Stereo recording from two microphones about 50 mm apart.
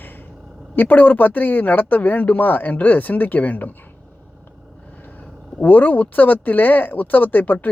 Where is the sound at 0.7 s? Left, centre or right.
Left.